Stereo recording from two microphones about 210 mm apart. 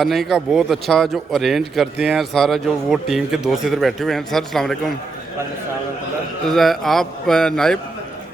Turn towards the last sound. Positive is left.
turn(degrees=5)  # may be behind; listen again after turning